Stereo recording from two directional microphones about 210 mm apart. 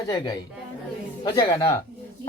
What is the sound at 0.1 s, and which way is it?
Speech, 20° left (ahead or behind).